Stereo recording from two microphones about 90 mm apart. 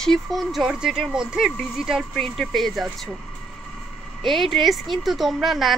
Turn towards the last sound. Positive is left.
turn(degrees=0)  # may be behind; listen again after turning